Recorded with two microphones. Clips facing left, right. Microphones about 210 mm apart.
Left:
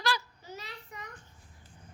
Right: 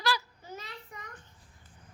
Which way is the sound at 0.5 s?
50° right (ahead or behind).